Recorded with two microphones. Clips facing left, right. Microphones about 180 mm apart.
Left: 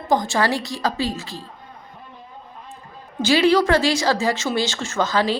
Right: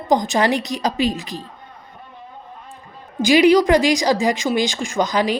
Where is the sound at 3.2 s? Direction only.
15° right (ahead or behind).